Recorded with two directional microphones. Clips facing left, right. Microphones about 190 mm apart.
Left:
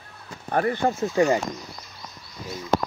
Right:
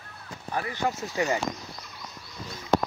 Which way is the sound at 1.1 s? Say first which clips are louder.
Left 8 dB; 35° left (ahead or behind).